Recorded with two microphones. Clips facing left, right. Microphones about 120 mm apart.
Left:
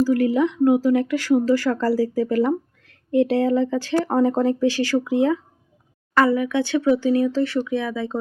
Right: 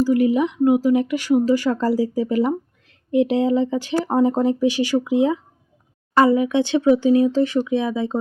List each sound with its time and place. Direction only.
0.0 s speech: 15° right (ahead or behind)